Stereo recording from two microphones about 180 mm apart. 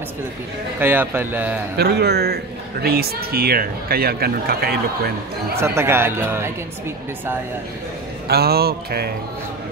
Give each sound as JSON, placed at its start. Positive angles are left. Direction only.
{"t": 0.7, "sound": "speech", "side_deg": -10}
{"t": 1.8, "sound": "a man's voice", "side_deg": -65}
{"t": 5.6, "sound": "speech", "side_deg": -15}
{"t": 8.3, "sound": "a man's voice", "side_deg": -60}